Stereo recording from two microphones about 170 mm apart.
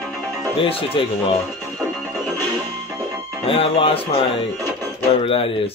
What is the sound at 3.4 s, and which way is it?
Speech, 35° left (ahead or behind).